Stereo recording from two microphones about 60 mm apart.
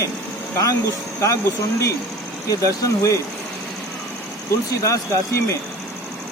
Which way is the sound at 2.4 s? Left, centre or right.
Left.